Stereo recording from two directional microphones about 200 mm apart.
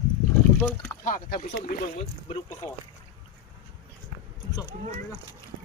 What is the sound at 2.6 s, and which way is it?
Speech, 20° left (ahead or behind).